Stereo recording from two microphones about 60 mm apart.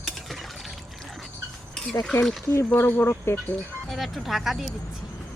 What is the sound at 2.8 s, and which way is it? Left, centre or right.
Speech, left.